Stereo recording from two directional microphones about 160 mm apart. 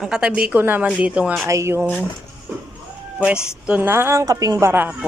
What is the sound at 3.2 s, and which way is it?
A woman's voice, 5° right (ahead or behind).